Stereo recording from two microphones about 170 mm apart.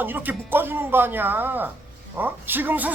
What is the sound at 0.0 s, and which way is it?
A man's voice, 10° right (ahead or behind).